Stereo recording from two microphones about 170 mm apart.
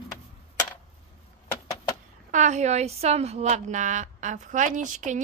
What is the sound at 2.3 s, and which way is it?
A woman's voice, 45° right (ahead or behind).